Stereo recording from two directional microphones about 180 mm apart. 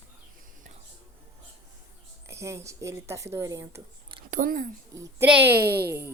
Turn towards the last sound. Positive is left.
turn(degrees=-60)  # may be behind; listen again after turning